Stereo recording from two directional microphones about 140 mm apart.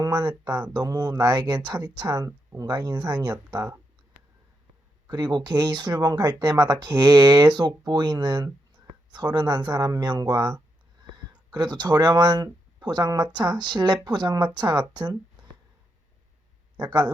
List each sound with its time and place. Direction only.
0.0 s speech: 30° right (ahead or behind)
5.0 s speech: 30° right (ahead or behind)
16.7 s speech: 30° right (ahead or behind)